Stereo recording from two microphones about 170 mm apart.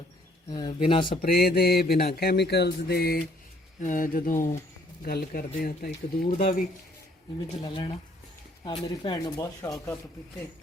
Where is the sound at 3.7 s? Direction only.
50° left (ahead or behind).